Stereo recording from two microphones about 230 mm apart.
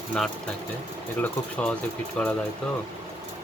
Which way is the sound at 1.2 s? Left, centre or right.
Centre.